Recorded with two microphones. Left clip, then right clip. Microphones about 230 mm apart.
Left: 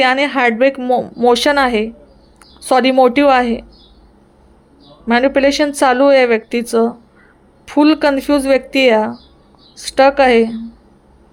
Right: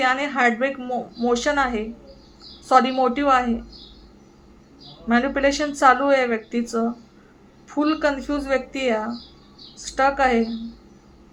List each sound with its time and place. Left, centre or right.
0.0 s speech: left
5.0 s speech: left